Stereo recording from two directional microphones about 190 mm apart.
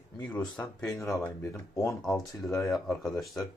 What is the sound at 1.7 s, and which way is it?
Speech, 15° left (ahead or behind).